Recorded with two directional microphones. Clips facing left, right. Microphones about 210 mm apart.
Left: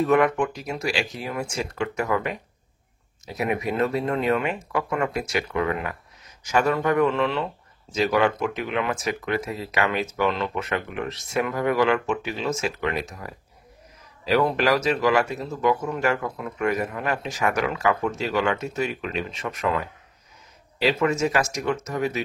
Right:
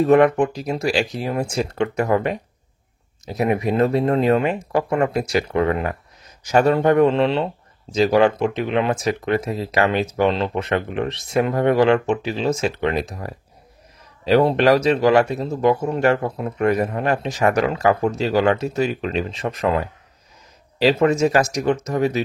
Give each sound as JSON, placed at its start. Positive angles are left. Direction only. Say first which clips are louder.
{"t": 0.0, "sound": "speech", "louder": "right 6 dB", "side_deg": -35}